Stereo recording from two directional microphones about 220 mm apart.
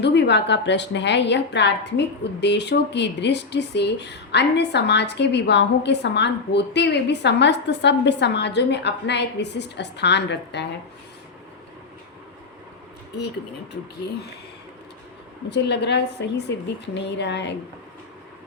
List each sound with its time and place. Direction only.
0.0 s speech: 50° left (ahead or behind)
15.4 s speech: 50° left (ahead or behind)